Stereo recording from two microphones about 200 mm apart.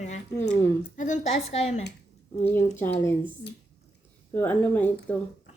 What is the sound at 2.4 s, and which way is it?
Speech, 10° left (ahead or behind).